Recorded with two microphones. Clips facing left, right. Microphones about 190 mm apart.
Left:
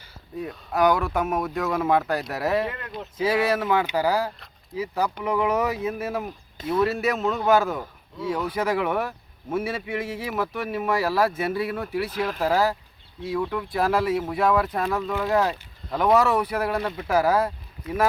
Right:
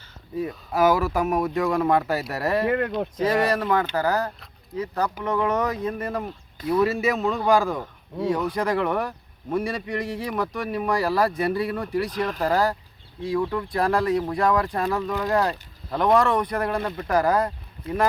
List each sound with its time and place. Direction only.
0.3 s speech: centre (ahead or behind)
2.6 s speech: 65° right (ahead or behind)
3.2 s speech: 5° left (ahead or behind)